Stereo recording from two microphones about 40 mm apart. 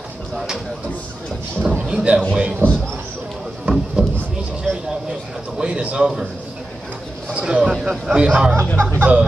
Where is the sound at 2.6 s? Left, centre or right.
Right.